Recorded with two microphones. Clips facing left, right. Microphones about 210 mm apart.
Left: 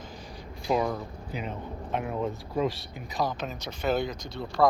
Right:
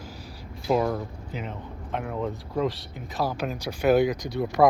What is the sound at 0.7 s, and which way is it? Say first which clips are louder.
Speech: right 3 dB; centre (ahead or behind).